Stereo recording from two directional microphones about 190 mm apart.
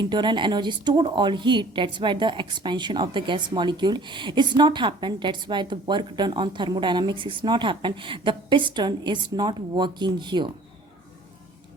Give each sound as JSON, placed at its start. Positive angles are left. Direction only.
{"t": 0.0, "sound": "a woman's voice", "side_deg": -25}